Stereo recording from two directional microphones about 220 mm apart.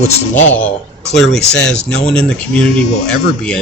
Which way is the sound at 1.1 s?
Centre (ahead or behind).